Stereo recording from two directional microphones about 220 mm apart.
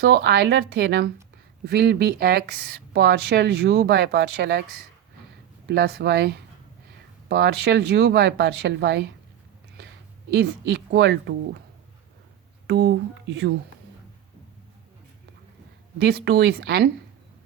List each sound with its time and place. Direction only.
0.0 s speech: 50° right (ahead or behind)
5.6 s speech: 45° right (ahead or behind)
10.3 s speech: 50° right (ahead or behind)
12.6 s speech: 50° right (ahead or behind)
16.0 s speech: 50° right (ahead or behind)